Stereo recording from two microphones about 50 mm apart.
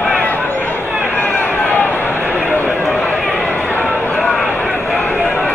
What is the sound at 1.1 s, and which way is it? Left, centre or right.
Run, left.